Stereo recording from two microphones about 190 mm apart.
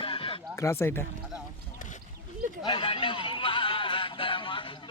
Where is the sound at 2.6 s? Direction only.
25° left (ahead or behind).